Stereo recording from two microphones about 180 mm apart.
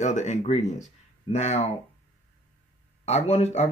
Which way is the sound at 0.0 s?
40° left (ahead or behind).